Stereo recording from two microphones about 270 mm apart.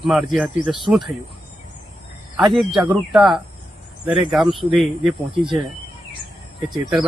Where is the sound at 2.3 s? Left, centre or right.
Centre.